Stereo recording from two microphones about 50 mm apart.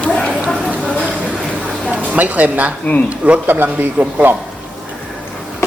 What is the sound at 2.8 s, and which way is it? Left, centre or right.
Speech, left.